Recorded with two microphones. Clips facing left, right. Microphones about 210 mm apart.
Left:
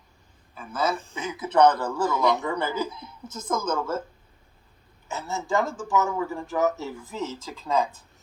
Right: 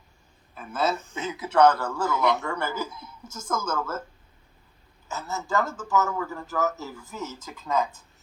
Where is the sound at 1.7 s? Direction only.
15° left (ahead or behind).